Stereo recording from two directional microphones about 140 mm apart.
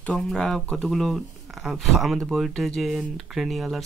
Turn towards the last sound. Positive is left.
turn(degrees=0)  # may be behind; listen again after turning